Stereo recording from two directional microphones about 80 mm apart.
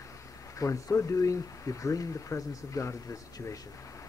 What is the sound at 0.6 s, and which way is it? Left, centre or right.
A man's voice, left.